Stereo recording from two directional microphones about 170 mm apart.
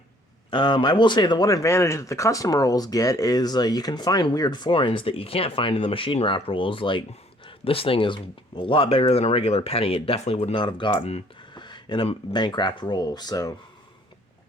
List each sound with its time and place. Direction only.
0.5 s speech: 25° left (ahead or behind)